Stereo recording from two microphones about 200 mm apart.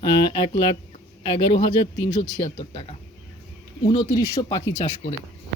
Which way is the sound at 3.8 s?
20° left (ahead or behind).